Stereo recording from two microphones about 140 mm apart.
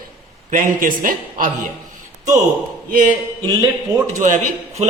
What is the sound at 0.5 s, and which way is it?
Speech, 80° right.